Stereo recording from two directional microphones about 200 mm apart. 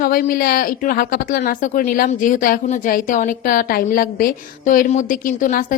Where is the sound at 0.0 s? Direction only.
45° left (ahead or behind).